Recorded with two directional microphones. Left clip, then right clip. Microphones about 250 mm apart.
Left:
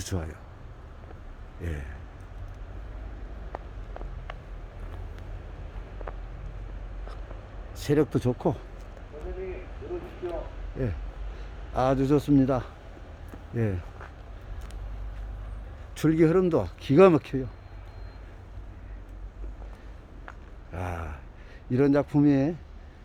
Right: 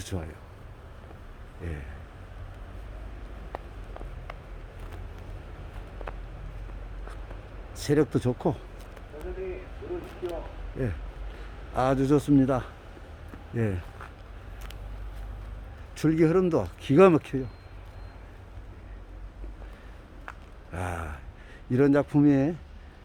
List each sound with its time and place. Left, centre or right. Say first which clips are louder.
0.0 s speech: left 2 dB; centre
3.5 s a sound: even; centre
6.0 s vehicle: even; centre
7.8 s a man's voice: even; centre
10.8 s a man's voice: even; centre
16.0 s speech: left 1 dB; centre
20.7 s a man's voice: right 1 dB; centre